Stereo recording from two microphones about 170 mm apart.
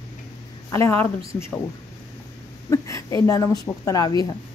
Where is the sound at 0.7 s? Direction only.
15° left (ahead or behind).